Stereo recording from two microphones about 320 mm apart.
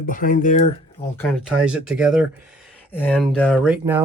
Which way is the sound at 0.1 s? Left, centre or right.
Left.